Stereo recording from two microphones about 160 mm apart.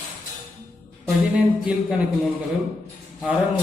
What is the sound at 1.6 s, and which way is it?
Speech, 5° right (ahead or behind).